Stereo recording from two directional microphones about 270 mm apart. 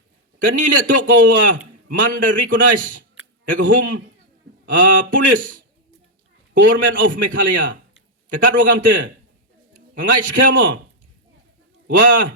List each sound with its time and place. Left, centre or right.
0.3 s a man's voice: right
11.9 s a man's voice: right